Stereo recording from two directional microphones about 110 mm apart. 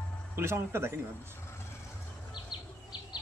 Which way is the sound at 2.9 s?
40° left (ahead or behind).